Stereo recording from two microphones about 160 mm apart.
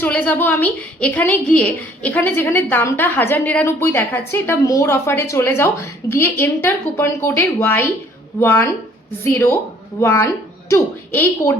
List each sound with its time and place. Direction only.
0.0 s a woman's voice: 10° left (ahead or behind)